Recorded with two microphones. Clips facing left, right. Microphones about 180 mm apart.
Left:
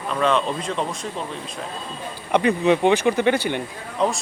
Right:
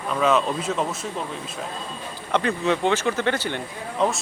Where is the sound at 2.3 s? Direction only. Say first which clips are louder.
Left 4 dB; 15° left (ahead or behind).